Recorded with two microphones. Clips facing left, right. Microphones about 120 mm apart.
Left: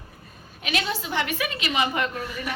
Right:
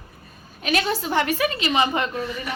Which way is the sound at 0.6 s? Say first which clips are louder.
Right 5 dB; 45° right (ahead or behind).